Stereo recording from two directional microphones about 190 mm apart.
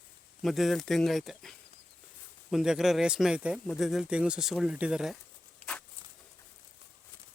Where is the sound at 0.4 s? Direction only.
Centre (ahead or behind).